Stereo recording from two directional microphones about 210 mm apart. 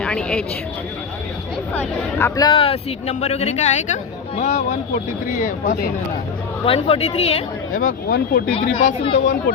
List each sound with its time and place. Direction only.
0.0 s speech: 5° left (ahead or behind)
1.7 s speech: 10° left (ahead or behind); by 5.9 s 45° left (ahead or behind)
6.7 s speech: 25° left (ahead or behind)
7.8 s speech: 45° left (ahead or behind)
8.5 s speech: 25° left (ahead or behind)